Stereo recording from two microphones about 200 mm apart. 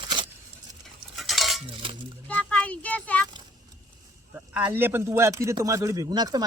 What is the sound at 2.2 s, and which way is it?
Speech, 5° left (ahead or behind).